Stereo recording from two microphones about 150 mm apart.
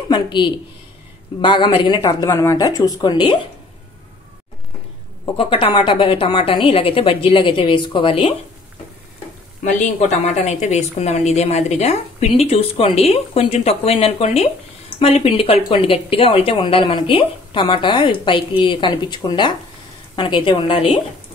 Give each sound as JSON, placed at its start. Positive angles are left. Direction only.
{"t": 0.1, "sound": "a woman's voice", "side_deg": 30}
{"t": 5.2, "sound": "a woman's voice", "side_deg": 35}
{"t": 10.2, "sound": "a woman's voice", "side_deg": 50}